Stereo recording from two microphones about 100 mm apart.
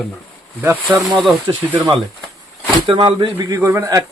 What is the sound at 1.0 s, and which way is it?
Speech, centre (ahead or behind).